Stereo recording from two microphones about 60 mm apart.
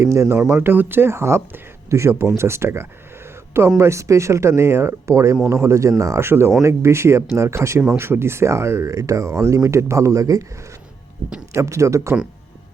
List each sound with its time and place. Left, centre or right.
0.0 s speech: right
3.2 s a sound: right
3.8 s speech: right
6.1 s speech: right
11.5 s speech: right